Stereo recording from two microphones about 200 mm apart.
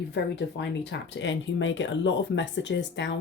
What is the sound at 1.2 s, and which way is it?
Speech, 65° left (ahead or behind).